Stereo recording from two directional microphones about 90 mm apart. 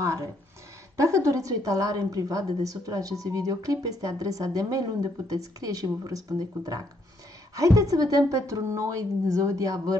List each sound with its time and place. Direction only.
0.0 s a woman's voice: 35° right (ahead or behind)